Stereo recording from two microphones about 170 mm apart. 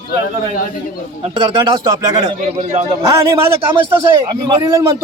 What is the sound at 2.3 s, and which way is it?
Speech, 40° right (ahead or behind).